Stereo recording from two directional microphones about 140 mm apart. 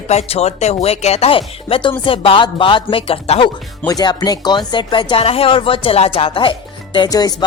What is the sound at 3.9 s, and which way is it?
Speech, 30° left (ahead or behind).